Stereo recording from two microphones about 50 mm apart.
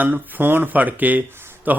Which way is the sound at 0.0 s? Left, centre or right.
Right.